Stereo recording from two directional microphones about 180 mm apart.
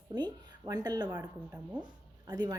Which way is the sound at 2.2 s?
20° right (ahead or behind).